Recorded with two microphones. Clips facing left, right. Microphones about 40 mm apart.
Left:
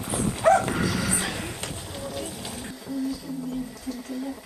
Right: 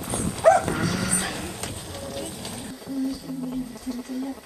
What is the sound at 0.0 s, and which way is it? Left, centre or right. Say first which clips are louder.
Dog: left 1 dB; centre.